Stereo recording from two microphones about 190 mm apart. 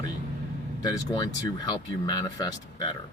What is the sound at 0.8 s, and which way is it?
Speech, 20° left (ahead or behind).